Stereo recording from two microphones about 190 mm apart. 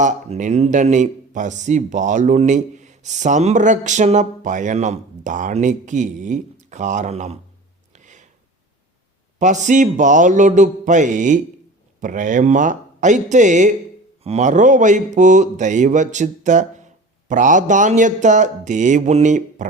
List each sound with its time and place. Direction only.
0.0 s speech: 40° right (ahead or behind)
7.9 s a sound: 40° right (ahead or behind)
9.4 s speech: 40° right (ahead or behind)